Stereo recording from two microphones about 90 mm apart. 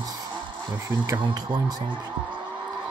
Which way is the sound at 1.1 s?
50° right (ahead or behind).